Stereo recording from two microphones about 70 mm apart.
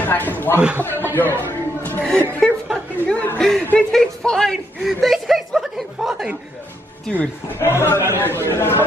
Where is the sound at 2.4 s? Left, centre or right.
Centre.